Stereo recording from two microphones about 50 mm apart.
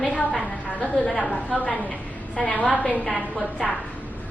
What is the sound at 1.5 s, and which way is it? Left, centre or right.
A woman's voice, left.